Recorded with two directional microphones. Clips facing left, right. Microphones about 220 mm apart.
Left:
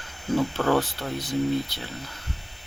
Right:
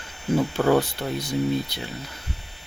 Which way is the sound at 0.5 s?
15° right (ahead or behind).